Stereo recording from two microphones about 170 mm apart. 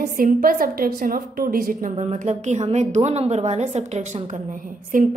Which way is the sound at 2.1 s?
45° right (ahead or behind).